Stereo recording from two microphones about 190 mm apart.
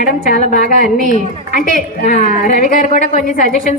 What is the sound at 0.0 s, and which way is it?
A woman's voice, 45° left (ahead or behind).